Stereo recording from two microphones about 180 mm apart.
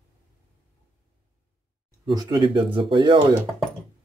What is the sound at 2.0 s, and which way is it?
Speech, 25° right (ahead or behind).